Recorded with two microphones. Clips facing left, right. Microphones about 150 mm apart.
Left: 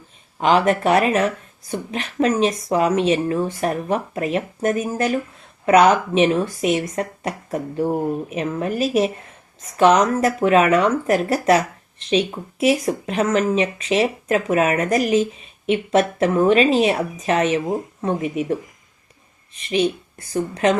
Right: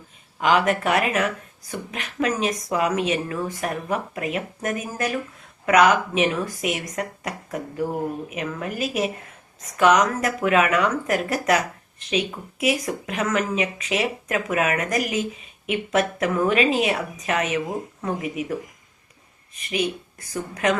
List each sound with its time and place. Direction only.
0.3 s speech: 30° left (ahead or behind)
19.7 s speech: 30° left (ahead or behind)